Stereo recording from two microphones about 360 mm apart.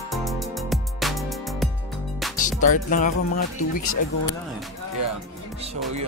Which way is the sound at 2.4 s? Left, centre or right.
Left.